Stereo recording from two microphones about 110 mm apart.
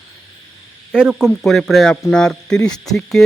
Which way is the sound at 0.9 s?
10° right (ahead or behind).